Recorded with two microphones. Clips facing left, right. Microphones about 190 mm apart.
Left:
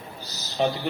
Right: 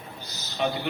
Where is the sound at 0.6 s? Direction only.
35° left (ahead or behind).